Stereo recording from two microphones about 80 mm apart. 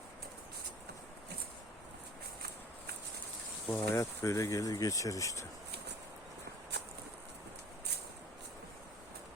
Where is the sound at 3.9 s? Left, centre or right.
Left.